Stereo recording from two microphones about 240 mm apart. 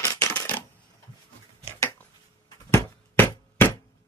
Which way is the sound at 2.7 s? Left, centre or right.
Centre.